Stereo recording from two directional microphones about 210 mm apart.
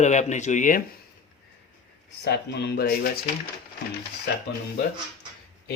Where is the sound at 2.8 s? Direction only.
45° left (ahead or behind).